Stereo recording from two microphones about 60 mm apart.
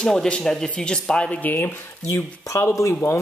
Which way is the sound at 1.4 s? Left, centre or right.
Left.